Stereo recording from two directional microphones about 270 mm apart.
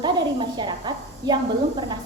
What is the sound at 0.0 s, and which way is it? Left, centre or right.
A woman's voice, centre.